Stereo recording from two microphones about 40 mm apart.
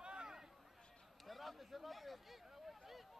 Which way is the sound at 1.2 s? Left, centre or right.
Centre.